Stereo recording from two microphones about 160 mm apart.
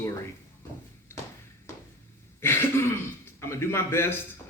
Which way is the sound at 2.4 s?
15° left (ahead or behind).